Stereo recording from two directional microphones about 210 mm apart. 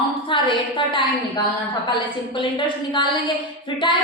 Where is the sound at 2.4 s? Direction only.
20° left (ahead or behind).